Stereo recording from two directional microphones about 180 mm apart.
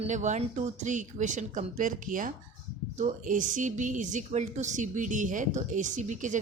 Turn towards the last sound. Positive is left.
turn(degrees=-45)  # may be behind; listen again after turning